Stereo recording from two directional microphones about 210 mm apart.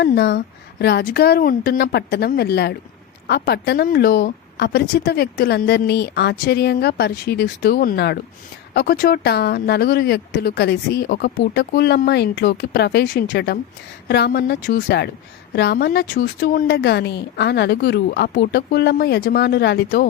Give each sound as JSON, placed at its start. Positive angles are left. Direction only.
{"t": 0.0, "sound": "speech", "side_deg": 55}